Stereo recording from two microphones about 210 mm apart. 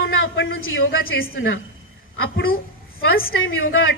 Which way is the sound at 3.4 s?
70° left (ahead or behind).